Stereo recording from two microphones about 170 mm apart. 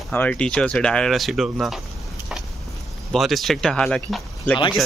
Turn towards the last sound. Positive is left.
turn(degrees=5)  # may be behind; listen again after turning